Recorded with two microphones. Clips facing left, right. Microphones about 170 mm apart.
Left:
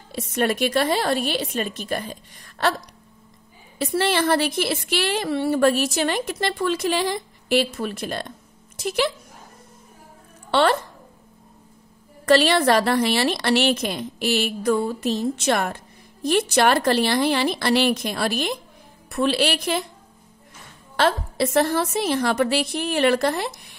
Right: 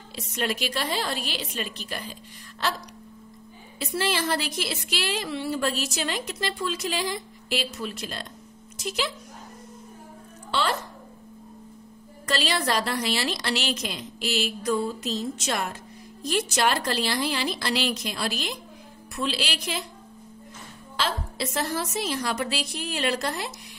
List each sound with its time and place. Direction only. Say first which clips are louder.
0.1 s a woman's voice: left 7 dB; 55° left (ahead or behind)
3.8 s a woman's voice: left 6 dB; 60° left (ahead or behind)
10.5 s speech: left 8 dB; 60° left (ahead or behind)
12.3 s a woman's voice: left 10 dB; 60° left (ahead or behind)
20.9 s a woman's voice: left 8 dB; 60° left (ahead or behind)